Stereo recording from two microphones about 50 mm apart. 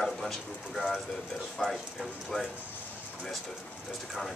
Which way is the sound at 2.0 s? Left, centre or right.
Centre.